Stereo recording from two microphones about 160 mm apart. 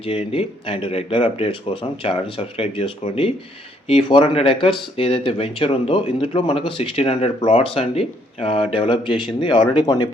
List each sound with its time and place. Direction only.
0.0 s speech: 35° left (ahead or behind)